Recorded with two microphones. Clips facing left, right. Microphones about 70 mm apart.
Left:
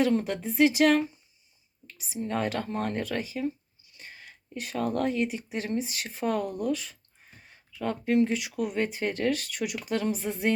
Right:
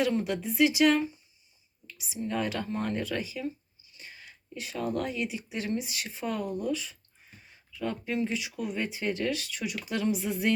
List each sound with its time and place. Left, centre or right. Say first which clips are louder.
0.1 s speech: left 2 dB; left
1.9 s a sound: right 1 dB; left
2.2 s speech: left 2 dB; left
9.9 s speech: right 1 dB; left